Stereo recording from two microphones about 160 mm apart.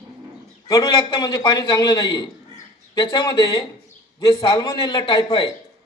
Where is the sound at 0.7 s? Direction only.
30° left (ahead or behind).